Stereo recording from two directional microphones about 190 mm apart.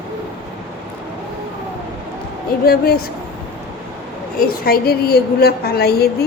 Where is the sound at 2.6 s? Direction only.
50° left (ahead or behind).